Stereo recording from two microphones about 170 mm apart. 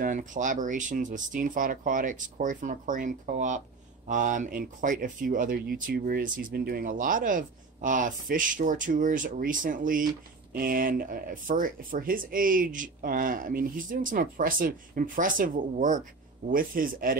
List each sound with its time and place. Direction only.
0.0 s speech: 50° right (ahead or behind)